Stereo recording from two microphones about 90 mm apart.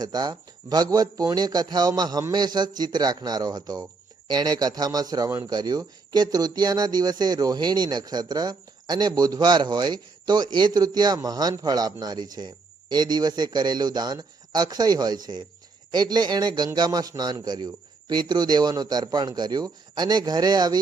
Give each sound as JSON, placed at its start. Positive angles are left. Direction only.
{"t": 0.0, "sound": "speech", "side_deg": -50}